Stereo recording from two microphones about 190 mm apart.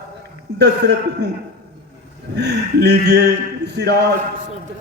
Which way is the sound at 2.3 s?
60° right (ahead or behind).